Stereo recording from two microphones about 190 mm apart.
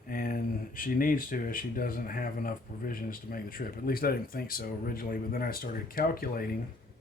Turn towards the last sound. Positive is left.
turn(degrees=50)  # may be behind; listen again after turning